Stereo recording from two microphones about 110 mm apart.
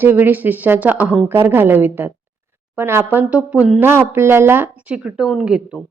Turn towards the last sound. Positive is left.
turn(degrees=-10)  # may be behind; listen again after turning